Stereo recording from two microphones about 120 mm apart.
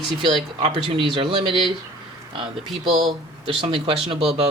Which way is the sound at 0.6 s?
45° right (ahead or behind).